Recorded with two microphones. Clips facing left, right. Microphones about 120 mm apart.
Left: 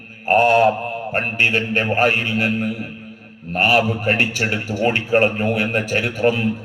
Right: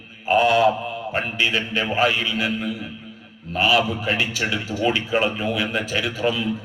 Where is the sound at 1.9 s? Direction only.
55° left (ahead or behind).